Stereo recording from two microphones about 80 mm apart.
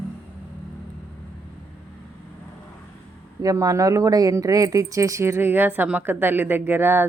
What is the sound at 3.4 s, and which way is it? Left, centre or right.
Speech, right.